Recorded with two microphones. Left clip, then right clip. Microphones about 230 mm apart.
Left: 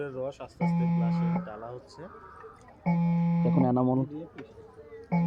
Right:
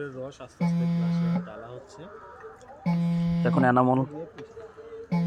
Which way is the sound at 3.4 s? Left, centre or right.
Right.